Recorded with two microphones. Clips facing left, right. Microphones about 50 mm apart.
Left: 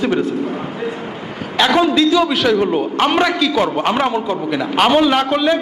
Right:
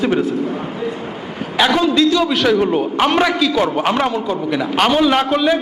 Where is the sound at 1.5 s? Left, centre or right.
Centre.